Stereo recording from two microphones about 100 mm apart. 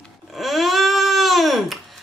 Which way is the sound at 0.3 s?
Centre (ahead or behind).